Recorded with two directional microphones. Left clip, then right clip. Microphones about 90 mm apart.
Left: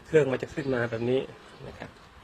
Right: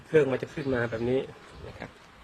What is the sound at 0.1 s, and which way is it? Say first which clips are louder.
A man's voice: even; 40° left (ahead or behind).